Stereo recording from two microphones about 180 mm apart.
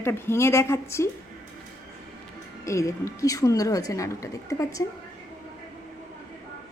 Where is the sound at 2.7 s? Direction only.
15° left (ahead or behind).